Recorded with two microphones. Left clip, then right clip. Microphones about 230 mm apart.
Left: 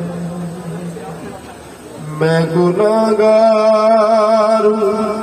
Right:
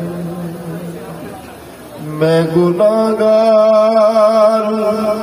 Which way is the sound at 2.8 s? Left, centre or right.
Right.